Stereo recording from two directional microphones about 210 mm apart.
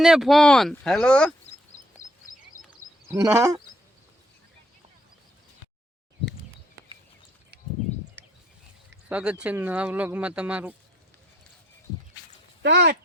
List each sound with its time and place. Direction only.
0.0 s speech: centre (ahead or behind)
3.3 s speech: 15° right (ahead or behind)
7.5 s a sound: 50° right (ahead or behind)
9.0 s speech: 5° right (ahead or behind)
12.6 s speech: 55° right (ahead or behind)